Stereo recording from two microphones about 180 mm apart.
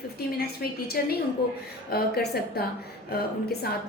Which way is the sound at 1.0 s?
50° left (ahead or behind).